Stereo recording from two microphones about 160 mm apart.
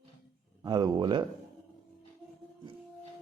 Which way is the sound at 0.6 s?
25° right (ahead or behind).